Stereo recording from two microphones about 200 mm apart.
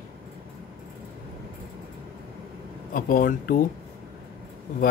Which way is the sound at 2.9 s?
45° left (ahead or behind).